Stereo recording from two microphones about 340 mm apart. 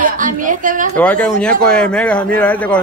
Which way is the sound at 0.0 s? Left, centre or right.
Right.